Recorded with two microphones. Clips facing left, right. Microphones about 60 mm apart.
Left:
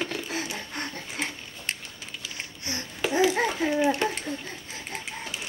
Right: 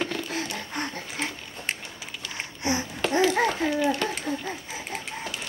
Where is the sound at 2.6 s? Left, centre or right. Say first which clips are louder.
Right 10 dB; right.